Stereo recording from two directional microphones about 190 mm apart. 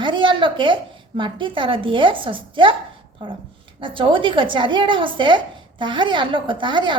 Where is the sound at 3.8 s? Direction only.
25° right (ahead or behind).